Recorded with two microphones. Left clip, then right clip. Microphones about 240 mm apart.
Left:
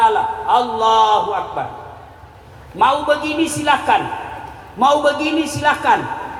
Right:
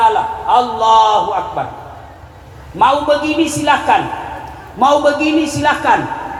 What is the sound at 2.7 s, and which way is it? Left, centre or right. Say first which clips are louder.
A woman's voice: right 3 dB; left.